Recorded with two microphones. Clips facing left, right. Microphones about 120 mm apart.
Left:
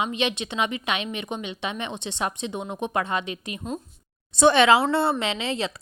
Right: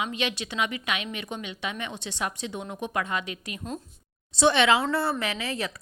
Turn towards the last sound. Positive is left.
turn(degrees=25)  # may be behind; listen again after turning